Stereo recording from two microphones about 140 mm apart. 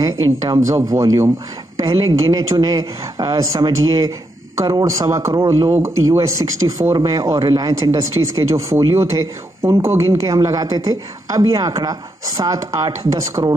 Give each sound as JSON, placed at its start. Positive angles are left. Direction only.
{"t": 0.0, "sound": "speech", "side_deg": -25}